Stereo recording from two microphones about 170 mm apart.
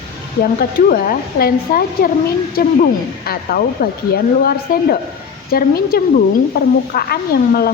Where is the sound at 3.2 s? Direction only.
60° left (ahead or behind).